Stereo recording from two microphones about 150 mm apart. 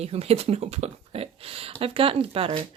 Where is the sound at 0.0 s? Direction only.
45° right (ahead or behind).